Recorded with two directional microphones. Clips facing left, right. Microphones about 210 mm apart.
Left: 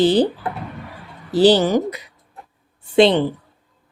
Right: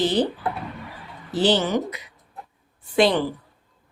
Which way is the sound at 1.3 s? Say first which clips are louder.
Left 7 dB; 35° left (ahead or behind).